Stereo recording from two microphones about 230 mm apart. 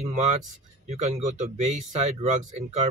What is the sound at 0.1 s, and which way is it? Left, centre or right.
Speech, right.